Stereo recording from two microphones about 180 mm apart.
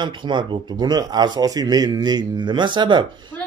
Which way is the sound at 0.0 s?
25° right (ahead or behind).